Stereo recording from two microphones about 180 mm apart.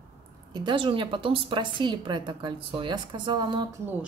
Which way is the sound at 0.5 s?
25° right (ahead or behind).